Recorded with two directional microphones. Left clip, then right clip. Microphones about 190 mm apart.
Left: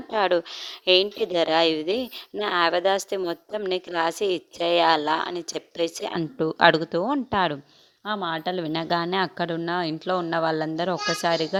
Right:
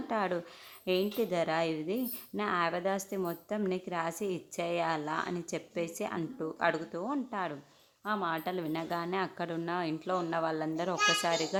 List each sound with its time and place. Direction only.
0.1 s a woman's voice: 40° left (ahead or behind)
8.0 s a woman's voice: 35° left (ahead or behind)